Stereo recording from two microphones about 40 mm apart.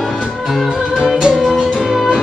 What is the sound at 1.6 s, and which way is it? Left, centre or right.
Music, centre.